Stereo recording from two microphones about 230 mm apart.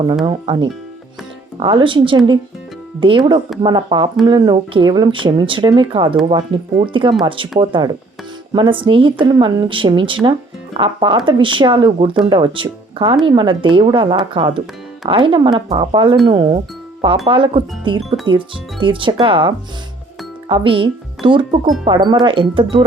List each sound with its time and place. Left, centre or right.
0.3 s speech: right